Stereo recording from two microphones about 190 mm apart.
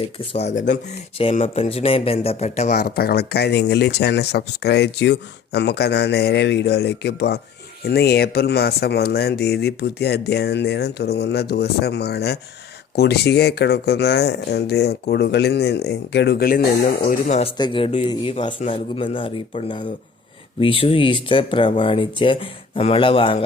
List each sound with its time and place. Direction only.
0.2 s speech: 35° left (ahead or behind)
17.6 s speech: 25° left (ahead or behind)